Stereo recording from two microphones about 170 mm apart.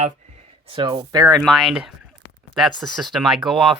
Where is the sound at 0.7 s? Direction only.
25° right (ahead or behind).